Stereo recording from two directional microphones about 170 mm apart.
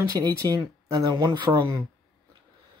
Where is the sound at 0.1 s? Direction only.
20° right (ahead or behind).